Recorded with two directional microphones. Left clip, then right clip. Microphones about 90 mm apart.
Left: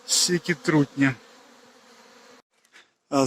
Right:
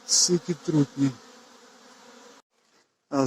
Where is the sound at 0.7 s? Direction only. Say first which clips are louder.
Left 3 dB; 40° right (ahead or behind).